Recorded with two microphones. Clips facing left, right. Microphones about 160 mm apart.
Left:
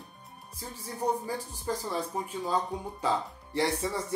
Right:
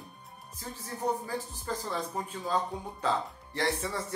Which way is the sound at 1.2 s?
15° left (ahead or behind).